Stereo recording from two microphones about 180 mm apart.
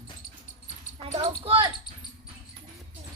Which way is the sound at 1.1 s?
30° right (ahead or behind).